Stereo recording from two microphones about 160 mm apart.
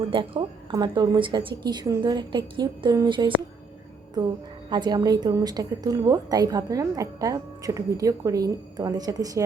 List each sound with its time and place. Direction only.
0.1 s a woman's voice: 30° right (ahead or behind)